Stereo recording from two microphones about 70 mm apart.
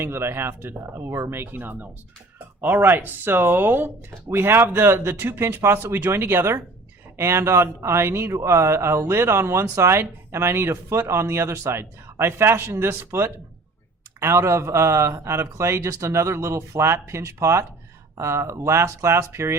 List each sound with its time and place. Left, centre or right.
0.0 s a man's voice: right